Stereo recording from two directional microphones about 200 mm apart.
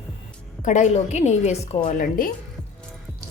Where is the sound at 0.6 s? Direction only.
35° left (ahead or behind).